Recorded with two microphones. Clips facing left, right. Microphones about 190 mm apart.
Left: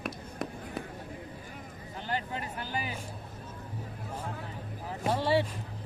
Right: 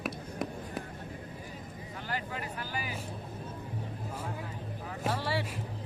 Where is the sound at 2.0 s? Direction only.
25° left (ahead or behind).